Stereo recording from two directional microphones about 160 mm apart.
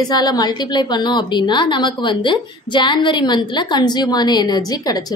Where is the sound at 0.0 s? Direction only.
25° left (ahead or behind).